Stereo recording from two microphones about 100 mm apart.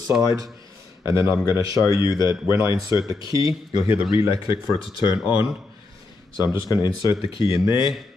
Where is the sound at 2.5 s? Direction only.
30° right (ahead or behind).